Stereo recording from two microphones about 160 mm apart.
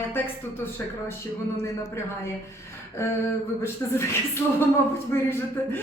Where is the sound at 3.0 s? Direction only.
15° left (ahead or behind).